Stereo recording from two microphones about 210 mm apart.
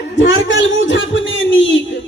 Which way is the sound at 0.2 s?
60° left (ahead or behind).